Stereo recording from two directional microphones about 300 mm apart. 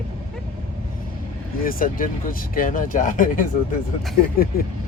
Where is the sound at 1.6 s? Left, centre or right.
Left.